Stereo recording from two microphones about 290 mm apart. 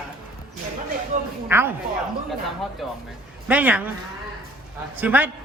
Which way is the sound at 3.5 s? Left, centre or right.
Centre.